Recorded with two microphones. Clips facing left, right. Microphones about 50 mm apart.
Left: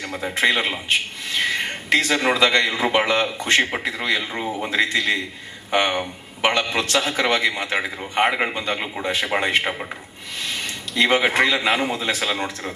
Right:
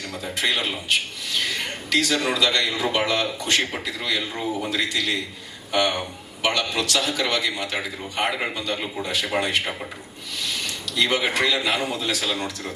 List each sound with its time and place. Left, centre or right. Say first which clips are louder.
0.1 s a man's voice: left 5 dB; left